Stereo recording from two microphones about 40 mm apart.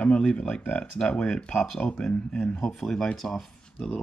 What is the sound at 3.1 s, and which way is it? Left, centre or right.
Speech, centre.